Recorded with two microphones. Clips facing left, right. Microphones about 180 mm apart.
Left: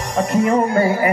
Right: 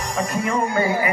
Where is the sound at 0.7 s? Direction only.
40° left (ahead or behind).